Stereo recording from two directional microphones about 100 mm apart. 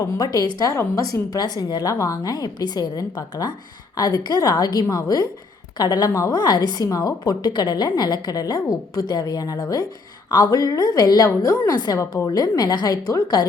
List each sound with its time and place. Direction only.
0.0 s a woman's voice: 40° left (ahead or behind)